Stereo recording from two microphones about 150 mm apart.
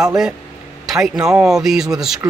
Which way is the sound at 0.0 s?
5° right (ahead or behind).